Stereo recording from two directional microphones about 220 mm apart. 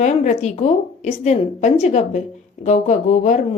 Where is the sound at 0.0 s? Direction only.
30° left (ahead or behind).